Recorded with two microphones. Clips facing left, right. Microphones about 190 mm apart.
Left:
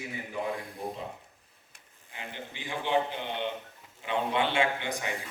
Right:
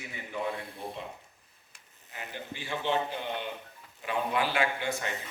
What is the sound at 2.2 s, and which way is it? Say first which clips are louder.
A man's voice: right 1 dB; 20° left (ahead or behind).